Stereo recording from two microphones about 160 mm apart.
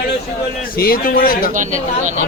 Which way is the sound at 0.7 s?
65° left (ahead or behind).